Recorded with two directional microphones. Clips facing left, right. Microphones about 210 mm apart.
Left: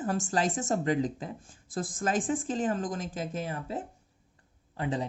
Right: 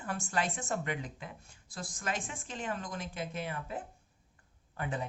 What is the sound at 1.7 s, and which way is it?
Speech, 50° left (ahead or behind).